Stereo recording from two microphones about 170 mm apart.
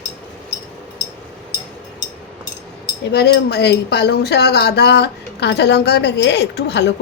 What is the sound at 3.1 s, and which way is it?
Speech, 70° left (ahead or behind).